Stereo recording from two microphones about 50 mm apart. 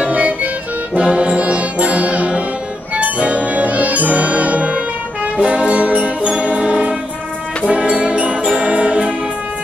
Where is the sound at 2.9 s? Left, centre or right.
Right.